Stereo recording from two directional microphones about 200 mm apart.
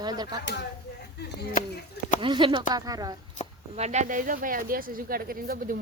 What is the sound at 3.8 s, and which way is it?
Speech, 35° right (ahead or behind).